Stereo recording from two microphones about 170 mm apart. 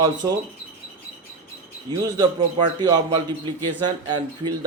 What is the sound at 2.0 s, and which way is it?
Speech, 25° right (ahead or behind).